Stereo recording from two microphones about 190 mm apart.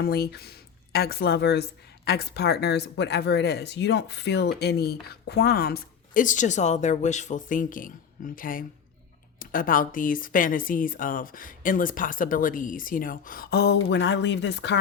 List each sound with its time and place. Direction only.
0.0 s speech: 55° left (ahead or behind)